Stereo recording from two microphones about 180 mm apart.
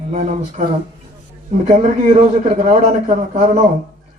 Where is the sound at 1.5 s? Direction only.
45° right (ahead or behind).